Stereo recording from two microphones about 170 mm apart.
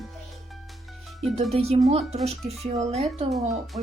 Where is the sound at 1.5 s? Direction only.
35° right (ahead or behind).